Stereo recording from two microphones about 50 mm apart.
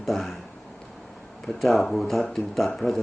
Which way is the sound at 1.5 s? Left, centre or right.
Centre.